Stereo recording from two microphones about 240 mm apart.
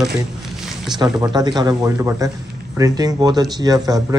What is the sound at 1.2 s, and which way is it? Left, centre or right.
A man's voice, centre.